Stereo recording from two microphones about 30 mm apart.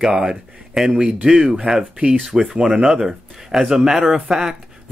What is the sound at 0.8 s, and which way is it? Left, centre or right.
Speech, right.